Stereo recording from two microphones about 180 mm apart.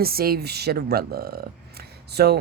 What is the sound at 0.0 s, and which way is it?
Speech, 55° right (ahead or behind).